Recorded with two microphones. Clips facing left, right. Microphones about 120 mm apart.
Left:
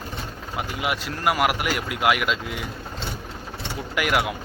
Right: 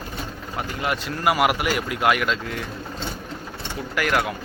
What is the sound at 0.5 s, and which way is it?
Speech, 10° left (ahead or behind).